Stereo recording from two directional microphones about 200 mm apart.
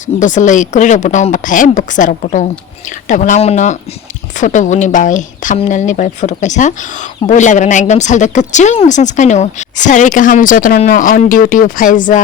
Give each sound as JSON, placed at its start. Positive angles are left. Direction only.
{"t": 0.0, "sound": "speech", "side_deg": 40}